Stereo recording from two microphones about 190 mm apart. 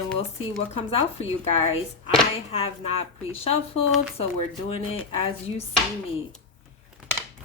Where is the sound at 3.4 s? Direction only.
30° left (ahead or behind).